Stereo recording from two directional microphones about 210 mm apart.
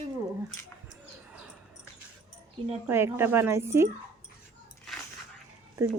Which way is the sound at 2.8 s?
10° right (ahead or behind).